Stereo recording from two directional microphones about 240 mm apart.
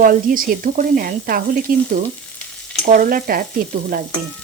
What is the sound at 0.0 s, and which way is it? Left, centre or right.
Frying, right.